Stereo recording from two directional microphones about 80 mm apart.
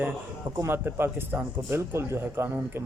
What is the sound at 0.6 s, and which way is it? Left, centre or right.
A man's voice, right.